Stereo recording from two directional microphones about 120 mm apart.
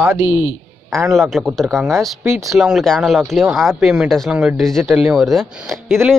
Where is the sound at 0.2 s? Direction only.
40° left (ahead or behind).